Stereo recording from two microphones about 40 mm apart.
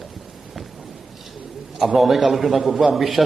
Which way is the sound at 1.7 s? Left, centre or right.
Centre.